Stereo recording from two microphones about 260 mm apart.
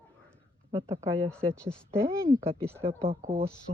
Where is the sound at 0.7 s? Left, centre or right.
Centre.